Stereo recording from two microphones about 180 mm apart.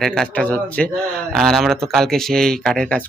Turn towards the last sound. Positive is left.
turn(degrees=5)  # may be behind; listen again after turning